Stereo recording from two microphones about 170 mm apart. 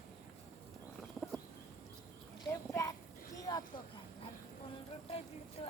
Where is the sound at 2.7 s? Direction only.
15° left (ahead or behind).